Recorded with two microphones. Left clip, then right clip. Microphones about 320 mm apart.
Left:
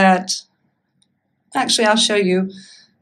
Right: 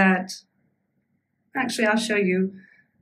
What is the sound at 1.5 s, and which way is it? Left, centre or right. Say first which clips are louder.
Speech: left 7 dB; centre.